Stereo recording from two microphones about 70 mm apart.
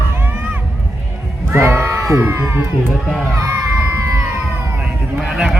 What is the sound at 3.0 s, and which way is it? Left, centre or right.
Speech, centre.